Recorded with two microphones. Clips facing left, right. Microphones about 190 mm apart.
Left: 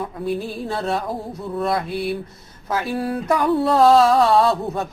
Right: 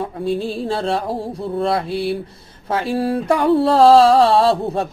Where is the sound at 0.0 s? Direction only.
30° right (ahead or behind).